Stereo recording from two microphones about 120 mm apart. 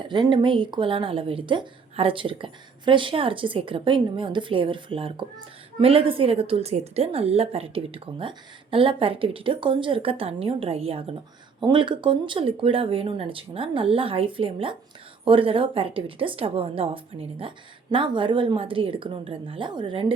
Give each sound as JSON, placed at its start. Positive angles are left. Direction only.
{"t": 0.0, "sound": "a woman's voice", "side_deg": -40}
{"t": 11.6, "sound": "a woman's voice", "side_deg": -40}